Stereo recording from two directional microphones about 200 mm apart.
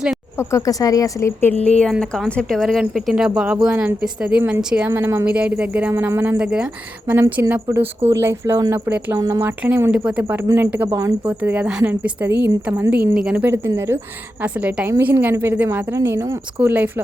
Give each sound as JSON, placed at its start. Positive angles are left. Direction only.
{"t": 0.3, "sound": "a woman's voice", "side_deg": 15}